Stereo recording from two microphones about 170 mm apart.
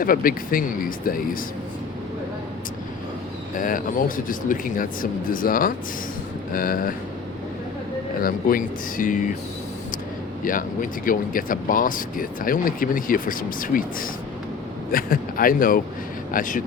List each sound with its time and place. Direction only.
0.0 s speech: 55° left (ahead or behind)
3.6 s speech: 55° left (ahead or behind)
8.2 s speech: 55° left (ahead or behind)
10.4 s speech: 55° left (ahead or behind)